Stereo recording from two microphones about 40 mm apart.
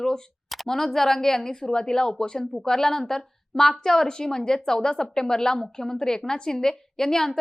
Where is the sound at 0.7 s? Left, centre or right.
Centre.